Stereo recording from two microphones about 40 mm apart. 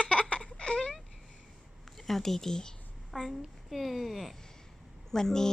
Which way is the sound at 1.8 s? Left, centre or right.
Centre.